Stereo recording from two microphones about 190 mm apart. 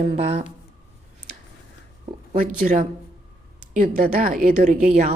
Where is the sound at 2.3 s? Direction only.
50° right (ahead or behind).